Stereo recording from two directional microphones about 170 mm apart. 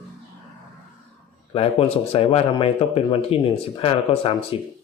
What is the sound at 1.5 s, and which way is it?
Speech, 35° left (ahead or behind).